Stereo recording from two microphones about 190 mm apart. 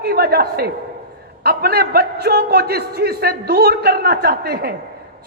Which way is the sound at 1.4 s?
55° right (ahead or behind).